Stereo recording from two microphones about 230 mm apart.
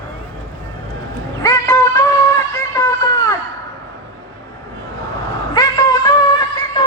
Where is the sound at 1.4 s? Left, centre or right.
Centre.